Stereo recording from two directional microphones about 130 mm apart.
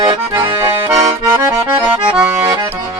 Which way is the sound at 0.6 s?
25° right (ahead or behind).